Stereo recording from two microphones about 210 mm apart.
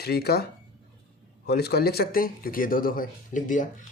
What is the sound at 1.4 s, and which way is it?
Speech, 50° left (ahead or behind).